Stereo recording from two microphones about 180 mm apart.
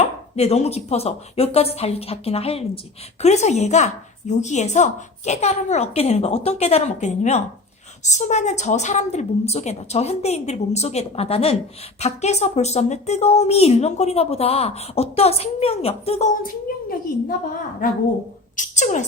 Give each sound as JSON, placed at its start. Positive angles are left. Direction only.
{"t": 0.3, "sound": "speech", "side_deg": 35}
{"t": 18.5, "sound": "speech", "side_deg": 40}